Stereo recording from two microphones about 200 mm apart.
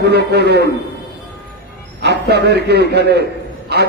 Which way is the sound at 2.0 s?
55° right (ahead or behind).